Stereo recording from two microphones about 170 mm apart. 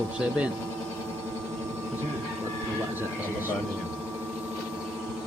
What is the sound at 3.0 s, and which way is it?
Speech, 10° right (ahead or behind).